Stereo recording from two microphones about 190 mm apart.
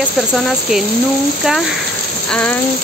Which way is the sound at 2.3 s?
5° left (ahead or behind).